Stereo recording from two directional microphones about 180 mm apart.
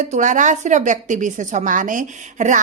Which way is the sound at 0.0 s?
45° right (ahead or behind).